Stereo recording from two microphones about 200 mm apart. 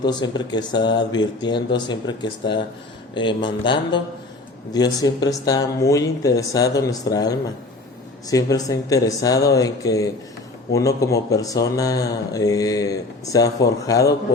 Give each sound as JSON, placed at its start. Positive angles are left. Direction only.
{"t": 0.0, "sound": "speech", "side_deg": 20}